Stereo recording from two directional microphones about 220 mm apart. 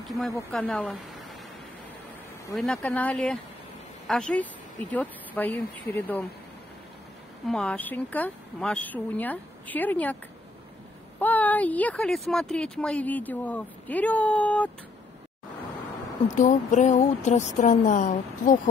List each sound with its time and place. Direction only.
0.5 s speech: 5° left (ahead or behind)
2.5 s speech: 5° left (ahead or behind)
7.4 s speech: 5° left (ahead or behind)
11.1 s speech: 5° left (ahead or behind)
16.3 s speech: 35° left (ahead or behind)